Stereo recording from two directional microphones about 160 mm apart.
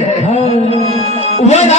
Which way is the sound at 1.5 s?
45° left (ahead or behind).